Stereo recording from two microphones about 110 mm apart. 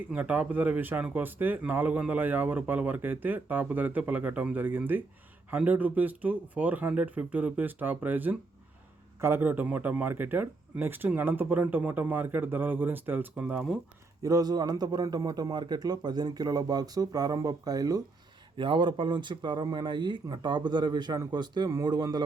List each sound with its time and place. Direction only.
0.1 s speech: 10° right (ahead or behind)
14.2 s a man's voice: 30° right (ahead or behind)
18.5 s speech: 50° right (ahead or behind)